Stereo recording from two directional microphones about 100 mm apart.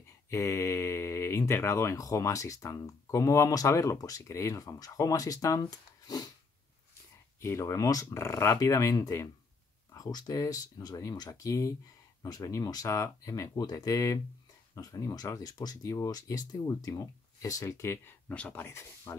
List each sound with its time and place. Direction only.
0.3 s speech: 30° left (ahead or behind)
7.4 s speech: 30° left (ahead or behind)
18.3 s speech: 15° left (ahead or behind)